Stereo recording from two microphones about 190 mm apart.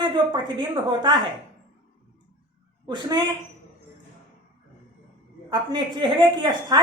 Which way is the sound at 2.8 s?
25° right (ahead or behind).